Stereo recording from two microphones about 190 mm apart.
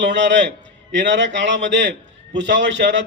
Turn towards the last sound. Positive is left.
turn(degrees=-65)  # may be behind; listen again after turning